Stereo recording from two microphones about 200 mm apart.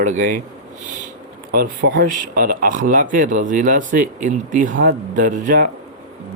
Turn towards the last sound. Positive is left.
turn(degrees=-40)  # may be behind; listen again after turning